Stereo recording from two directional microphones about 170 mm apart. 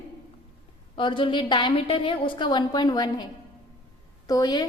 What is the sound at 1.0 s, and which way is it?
A woman's voice, 30° left (ahead or behind).